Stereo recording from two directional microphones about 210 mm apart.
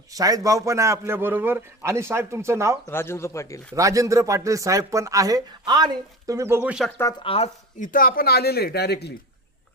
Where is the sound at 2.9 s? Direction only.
10° left (ahead or behind).